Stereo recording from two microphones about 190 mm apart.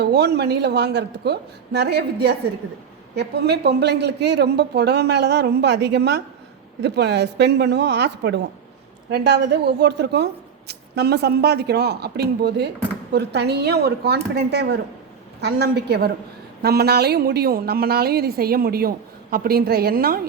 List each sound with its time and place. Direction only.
0.0 s a woman's voice: 60° right (ahead or behind)